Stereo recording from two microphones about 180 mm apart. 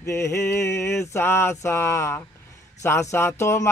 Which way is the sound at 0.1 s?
15° left (ahead or behind).